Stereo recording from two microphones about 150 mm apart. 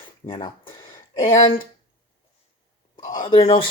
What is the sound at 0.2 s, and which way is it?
Speech, 35° left (ahead or behind).